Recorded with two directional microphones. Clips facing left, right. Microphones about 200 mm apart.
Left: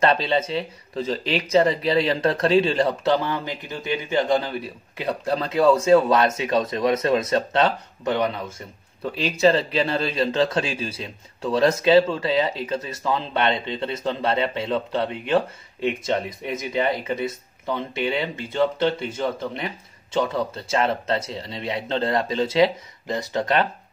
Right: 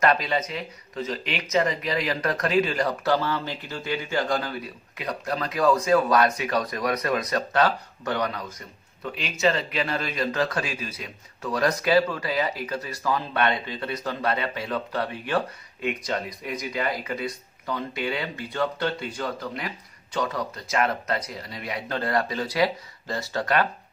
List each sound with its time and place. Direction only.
0.0 s speech: 30° left (ahead or behind)